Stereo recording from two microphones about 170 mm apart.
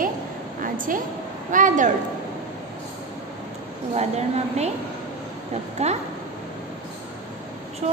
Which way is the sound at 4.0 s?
40° right (ahead or behind).